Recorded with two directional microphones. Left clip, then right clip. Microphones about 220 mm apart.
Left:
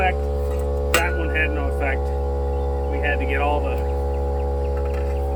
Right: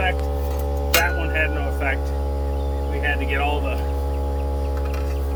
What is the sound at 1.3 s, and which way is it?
Hum, 10° right (ahead or behind).